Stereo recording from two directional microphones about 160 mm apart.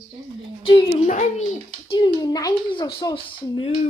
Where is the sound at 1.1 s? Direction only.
50° left (ahead or behind).